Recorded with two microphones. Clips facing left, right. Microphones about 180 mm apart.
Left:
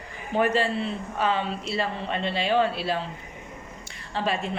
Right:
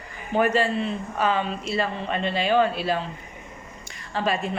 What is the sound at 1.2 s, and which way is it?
Speech, 30° left (ahead or behind).